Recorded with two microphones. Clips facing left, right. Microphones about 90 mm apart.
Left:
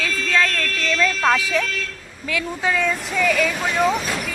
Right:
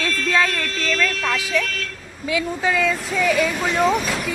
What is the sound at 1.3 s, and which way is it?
Speech, 25° left (ahead or behind).